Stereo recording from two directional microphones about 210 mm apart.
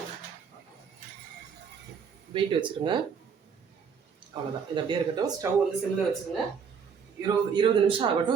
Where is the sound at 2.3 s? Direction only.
25° right (ahead or behind).